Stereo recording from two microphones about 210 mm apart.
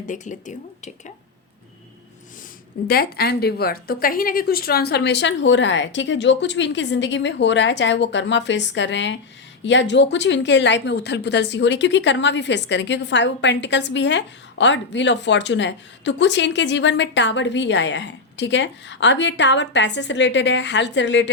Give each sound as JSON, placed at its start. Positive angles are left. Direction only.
{"t": 0.0, "sound": "speech", "side_deg": 35}
{"t": 2.8, "sound": "speech", "side_deg": 45}